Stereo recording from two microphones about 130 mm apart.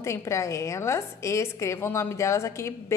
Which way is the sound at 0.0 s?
20° left (ahead or behind).